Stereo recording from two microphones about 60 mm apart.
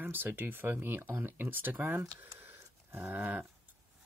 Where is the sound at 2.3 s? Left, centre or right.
Right.